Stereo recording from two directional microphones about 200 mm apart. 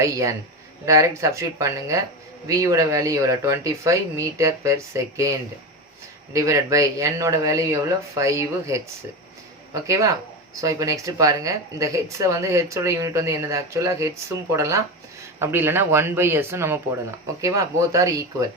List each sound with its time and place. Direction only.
0.0 s speech: 15° right (ahead or behind)
6.3 s speech: 15° right (ahead or behind)
9.8 s speech: 15° right (ahead or behind)